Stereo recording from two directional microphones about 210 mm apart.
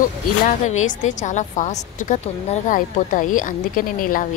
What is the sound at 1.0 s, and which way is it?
Speech, 35° left (ahead or behind).